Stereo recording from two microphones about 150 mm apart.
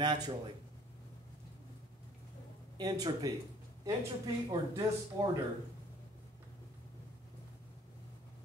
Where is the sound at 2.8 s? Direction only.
25° right (ahead or behind).